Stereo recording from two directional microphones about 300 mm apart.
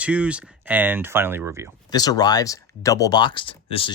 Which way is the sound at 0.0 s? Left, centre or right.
Centre.